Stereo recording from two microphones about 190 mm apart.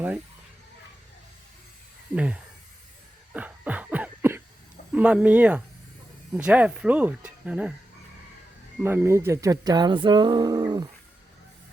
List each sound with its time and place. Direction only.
2.1 s speech: 5° right (ahead or behind)
3.3 s a sound: 10° right (ahead or behind)
4.9 s speech: 5° right (ahead or behind)
8.8 s speech: 10° right (ahead or behind)